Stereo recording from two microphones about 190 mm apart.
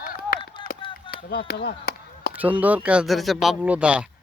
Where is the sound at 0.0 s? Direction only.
50° left (ahead or behind).